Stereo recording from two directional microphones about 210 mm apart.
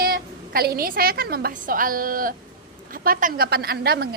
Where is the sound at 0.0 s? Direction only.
45° right (ahead or behind).